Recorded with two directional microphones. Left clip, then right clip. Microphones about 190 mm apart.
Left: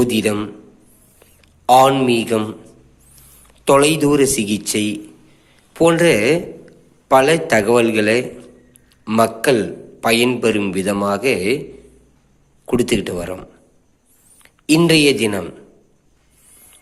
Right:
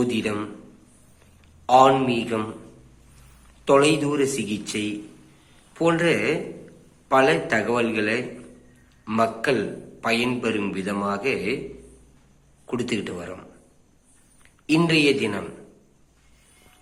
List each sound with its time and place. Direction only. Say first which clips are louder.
0.0 s a man's voice: left 8 dB; 45° left (ahead or behind)
3.6 s a man's voice: left 5 dB; 45° left (ahead or behind)
12.6 s a man's voice: left 9 dB; 45° left (ahead or behind)
14.4 s a man's voice: left 7 dB; 45° left (ahead or behind)